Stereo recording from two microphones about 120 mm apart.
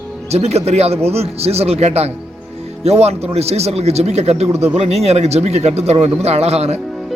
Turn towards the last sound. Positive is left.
turn(degrees=-65)  # may be behind; listen again after turning